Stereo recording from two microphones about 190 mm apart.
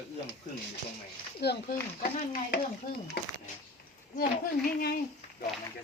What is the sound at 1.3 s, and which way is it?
Speech, 55° left (ahead or behind).